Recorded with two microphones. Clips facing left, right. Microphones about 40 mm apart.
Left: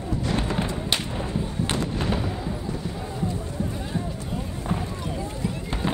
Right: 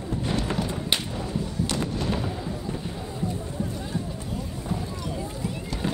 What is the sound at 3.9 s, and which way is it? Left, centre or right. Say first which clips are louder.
Basketball bounce: left 2 dB; left.